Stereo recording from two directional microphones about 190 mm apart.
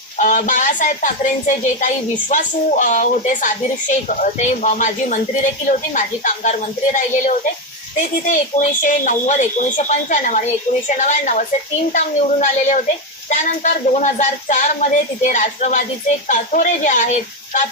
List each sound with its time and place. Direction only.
0.2 s speech: 40° left (ahead or behind)